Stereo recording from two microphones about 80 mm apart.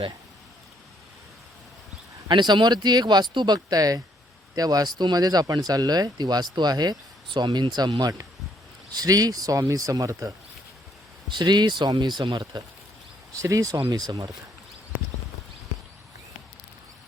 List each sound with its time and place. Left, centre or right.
2.2 s speech: right
8.9 s speech: right
11.3 s speech: right
13.3 s speech: right